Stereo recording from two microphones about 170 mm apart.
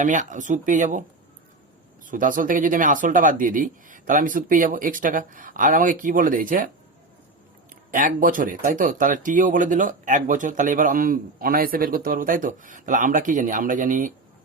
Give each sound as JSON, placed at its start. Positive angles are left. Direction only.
{"t": 0.0, "sound": "speech", "side_deg": -50}
{"t": 2.0, "sound": "speech", "side_deg": -50}
{"t": 7.9, "sound": "speech", "side_deg": -50}